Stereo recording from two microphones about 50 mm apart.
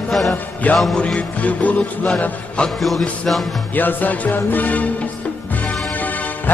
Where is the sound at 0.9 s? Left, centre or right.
Left.